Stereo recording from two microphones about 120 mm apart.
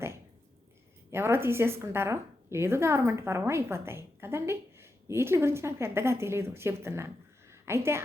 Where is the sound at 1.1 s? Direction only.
20° right (ahead or behind).